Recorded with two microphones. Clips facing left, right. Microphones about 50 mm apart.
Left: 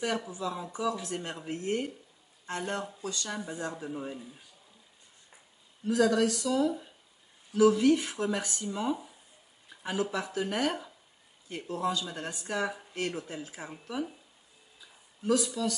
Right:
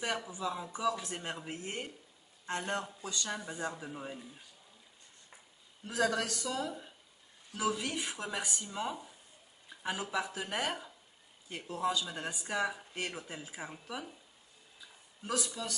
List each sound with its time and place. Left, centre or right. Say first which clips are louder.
0.4 s speech: left 2 dB; centre
5.9 s speech: left 6 dB; centre
6.3 s speech: left 9 dB; centre
9.7 s a sound: left 6 dB; centre
10.1 s speech: left 4 dB; centre
15.6 s speech: left 9 dB; right